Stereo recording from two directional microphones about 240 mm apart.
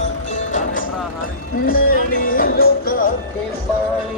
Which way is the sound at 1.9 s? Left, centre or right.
Left.